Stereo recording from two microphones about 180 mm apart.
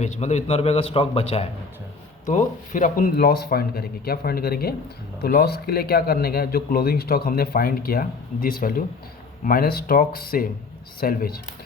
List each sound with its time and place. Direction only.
0.0 s a man's voice: 40° left (ahead or behind)
2.2 s speech: 45° left (ahead or behind)